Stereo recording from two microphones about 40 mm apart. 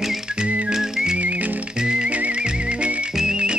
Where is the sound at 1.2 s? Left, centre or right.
Right.